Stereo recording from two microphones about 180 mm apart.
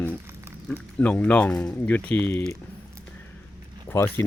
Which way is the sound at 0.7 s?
5° left (ahead or behind).